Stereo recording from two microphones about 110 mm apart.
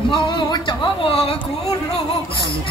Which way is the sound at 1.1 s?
60° left (ahead or behind).